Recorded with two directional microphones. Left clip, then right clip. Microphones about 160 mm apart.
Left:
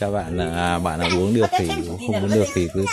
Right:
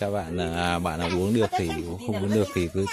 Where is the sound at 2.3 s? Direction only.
25° right (ahead or behind).